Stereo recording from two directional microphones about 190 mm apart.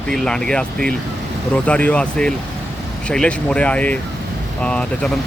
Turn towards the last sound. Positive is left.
turn(degrees=5)  # may be behind; listen again after turning